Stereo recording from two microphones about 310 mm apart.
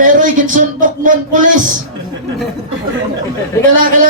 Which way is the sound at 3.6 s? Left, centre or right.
Centre.